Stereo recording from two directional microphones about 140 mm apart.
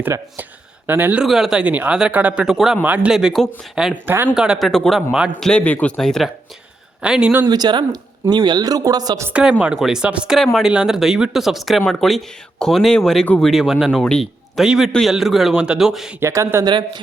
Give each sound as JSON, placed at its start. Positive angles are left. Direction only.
{"t": 0.0, "sound": "speech", "side_deg": -15}
{"t": 1.2, "sound": "speech", "side_deg": -5}
{"t": 4.0, "sound": "speech", "side_deg": -15}
{"t": 5.5, "sound": "speech", "side_deg": 10}
{"t": 7.4, "sound": "a man's voice", "side_deg": -30}
{"t": 9.3, "sound": "speech", "side_deg": -10}
{"t": 16.2, "sound": "a man's voice", "side_deg": -20}